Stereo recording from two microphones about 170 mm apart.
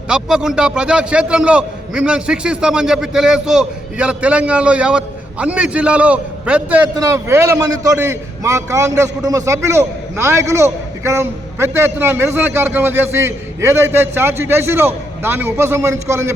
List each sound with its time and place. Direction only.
0.1 s a man's voice: 5° right (ahead or behind)